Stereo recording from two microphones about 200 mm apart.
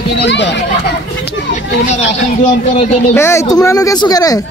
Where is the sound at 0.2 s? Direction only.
60° left (ahead or behind).